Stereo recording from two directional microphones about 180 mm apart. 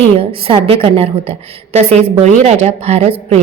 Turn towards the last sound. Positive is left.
turn(degrees=-35)  # may be behind; listen again after turning